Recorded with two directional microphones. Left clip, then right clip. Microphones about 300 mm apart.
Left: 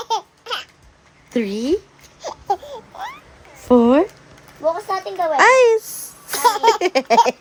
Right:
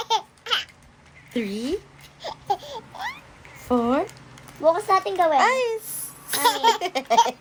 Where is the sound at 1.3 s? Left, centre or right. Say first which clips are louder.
Left 7 dB; centre.